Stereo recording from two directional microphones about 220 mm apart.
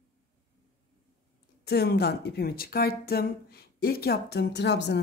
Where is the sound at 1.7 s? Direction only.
45° left (ahead or behind).